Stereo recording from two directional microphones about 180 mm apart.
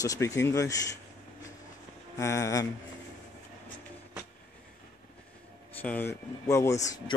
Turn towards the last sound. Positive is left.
turn(degrees=20)  # may be behind; listen again after turning